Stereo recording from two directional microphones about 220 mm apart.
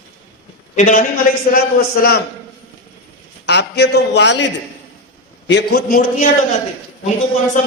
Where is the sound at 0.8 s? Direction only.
35° left (ahead or behind).